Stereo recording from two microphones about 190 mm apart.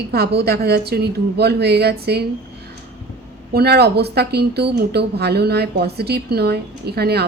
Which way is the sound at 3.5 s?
60° right (ahead or behind).